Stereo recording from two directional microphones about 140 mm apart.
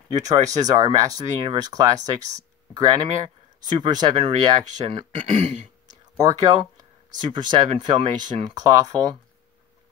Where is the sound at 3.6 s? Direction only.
30° right (ahead or behind).